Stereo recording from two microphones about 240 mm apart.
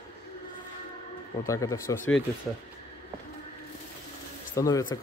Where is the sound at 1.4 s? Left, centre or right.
Centre.